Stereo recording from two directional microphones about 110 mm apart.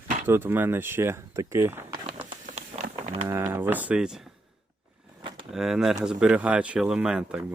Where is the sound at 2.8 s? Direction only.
90° right.